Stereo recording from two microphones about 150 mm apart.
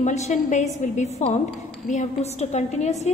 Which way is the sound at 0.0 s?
50° left (ahead or behind).